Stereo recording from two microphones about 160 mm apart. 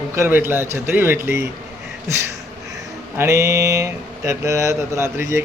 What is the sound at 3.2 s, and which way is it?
Speech, 20° right (ahead or behind).